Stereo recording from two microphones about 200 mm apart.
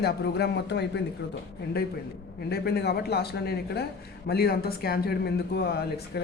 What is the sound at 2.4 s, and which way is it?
A man's voice, 50° left (ahead or behind).